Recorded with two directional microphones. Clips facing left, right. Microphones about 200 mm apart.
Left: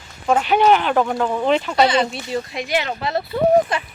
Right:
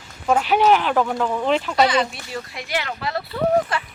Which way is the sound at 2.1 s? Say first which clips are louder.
Left 7 dB; 20° left (ahead or behind).